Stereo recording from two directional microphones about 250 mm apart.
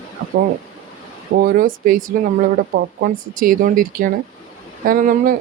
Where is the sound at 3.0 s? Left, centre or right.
Right.